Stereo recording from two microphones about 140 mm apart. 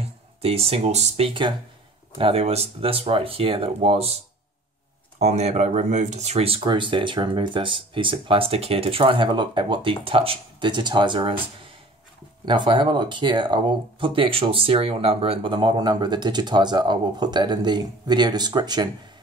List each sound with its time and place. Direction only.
0.0 s speech: 45° right (ahead or behind)
5.2 s speech: 55° right (ahead or behind); by 11.3 s 35° right (ahead or behind)
12.4 s speech: 35° right (ahead or behind)